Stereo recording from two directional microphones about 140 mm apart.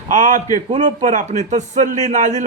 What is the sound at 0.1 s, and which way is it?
A man's voice, 70° right (ahead or behind).